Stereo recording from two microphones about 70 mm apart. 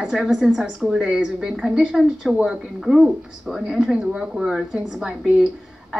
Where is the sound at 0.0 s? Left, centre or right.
Centre.